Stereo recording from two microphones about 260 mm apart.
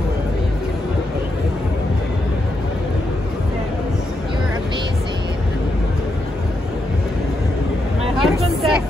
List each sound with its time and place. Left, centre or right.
8.2 s vehicle: centre